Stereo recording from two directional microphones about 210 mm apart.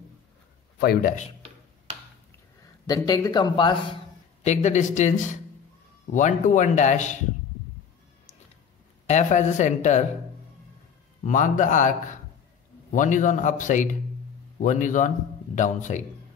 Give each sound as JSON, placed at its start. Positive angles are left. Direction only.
{"t": 0.7, "sound": "a man's voice", "side_deg": 50}
{"t": 2.9, "sound": "speech", "side_deg": 20}
{"t": 4.4, "sound": "a man's voice", "side_deg": 35}
{"t": 9.0, "sound": "a man's voice", "side_deg": 35}
{"t": 11.2, "sound": "a man's voice", "side_deg": 35}